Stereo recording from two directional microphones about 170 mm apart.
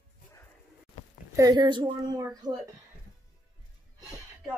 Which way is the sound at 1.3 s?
20° right (ahead or behind).